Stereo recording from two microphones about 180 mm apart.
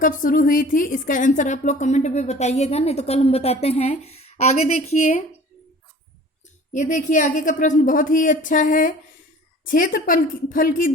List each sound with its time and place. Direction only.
0.0 s speech: 50° left (ahead or behind)
6.7 s speech: 45° left (ahead or behind)